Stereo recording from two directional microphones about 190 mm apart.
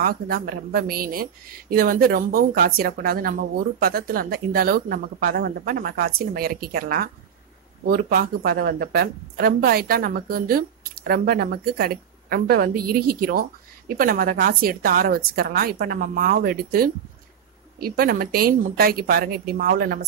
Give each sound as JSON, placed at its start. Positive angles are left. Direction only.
{"t": 0.0, "sound": "a woman's voice", "side_deg": -50}